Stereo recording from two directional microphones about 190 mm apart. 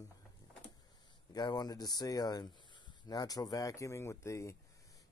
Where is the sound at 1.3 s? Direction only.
20° left (ahead or behind).